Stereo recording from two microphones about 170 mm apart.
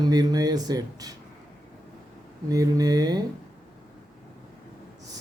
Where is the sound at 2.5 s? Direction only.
20° right (ahead or behind).